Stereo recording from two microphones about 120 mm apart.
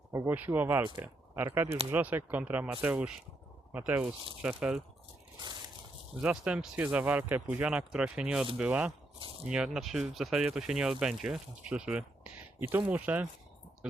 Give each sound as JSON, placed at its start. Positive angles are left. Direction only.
{"t": 0.1, "sound": "speech", "side_deg": -25}
{"t": 6.2, "sound": "speech", "side_deg": -10}